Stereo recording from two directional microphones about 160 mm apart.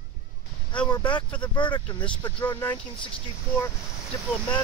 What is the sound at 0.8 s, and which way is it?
Speech, 30° left (ahead or behind).